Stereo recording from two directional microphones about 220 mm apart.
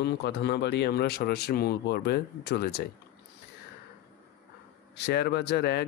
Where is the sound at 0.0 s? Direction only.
50° left (ahead or behind).